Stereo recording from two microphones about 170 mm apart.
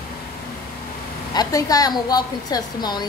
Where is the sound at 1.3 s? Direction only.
20° left (ahead or behind).